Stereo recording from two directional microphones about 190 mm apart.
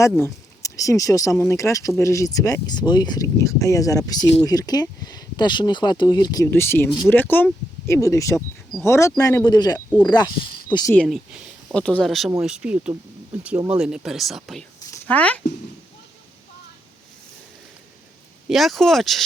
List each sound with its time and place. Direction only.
0.2 s speech: 15° left (ahead or behind)
10.9 s speech: centre (ahead or behind)
18.4 s speech: centre (ahead or behind)